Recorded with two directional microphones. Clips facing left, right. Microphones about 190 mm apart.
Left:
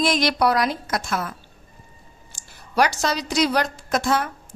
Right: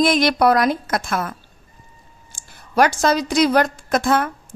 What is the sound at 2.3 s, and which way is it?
A woman's voice, 50° right (ahead or behind).